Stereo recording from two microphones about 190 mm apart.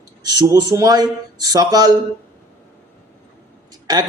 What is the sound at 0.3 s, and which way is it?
A man's voice, 20° right (ahead or behind).